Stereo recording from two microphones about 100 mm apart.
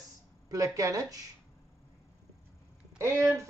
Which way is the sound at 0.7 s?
35° right (ahead or behind).